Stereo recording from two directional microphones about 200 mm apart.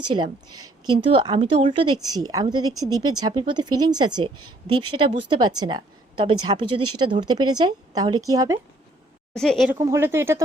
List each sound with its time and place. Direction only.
0.1 s speech: 20° right (ahead or behind)
4.4 s a woman's voice: 90° right
4.9 s speech: 25° right (ahead or behind)
9.3 s a woman's voice: 5° left (ahead or behind)
9.6 s speech: 15° right (ahead or behind)